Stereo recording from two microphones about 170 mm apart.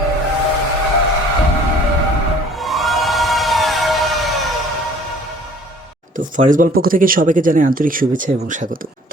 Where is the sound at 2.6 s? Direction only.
Centre (ahead or behind).